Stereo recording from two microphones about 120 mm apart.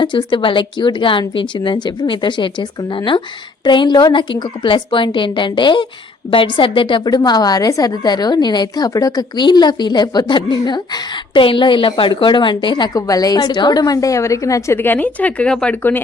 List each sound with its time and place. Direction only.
0.0 s a woman's voice: 40° left (ahead or behind); by 16.0 s 15° left (ahead or behind)